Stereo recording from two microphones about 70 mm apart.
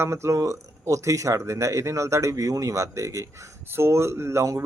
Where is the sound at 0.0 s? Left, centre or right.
Right.